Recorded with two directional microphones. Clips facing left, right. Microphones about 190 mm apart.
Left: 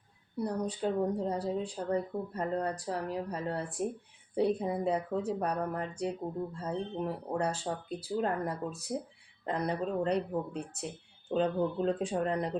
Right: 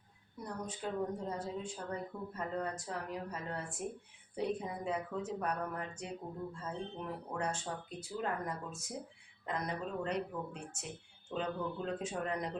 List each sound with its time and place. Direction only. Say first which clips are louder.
0.3 s speech: left 10 dB; 35° left (ahead or behind)